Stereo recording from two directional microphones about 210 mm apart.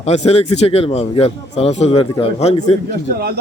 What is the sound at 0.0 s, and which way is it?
Speech, 30° left (ahead or behind).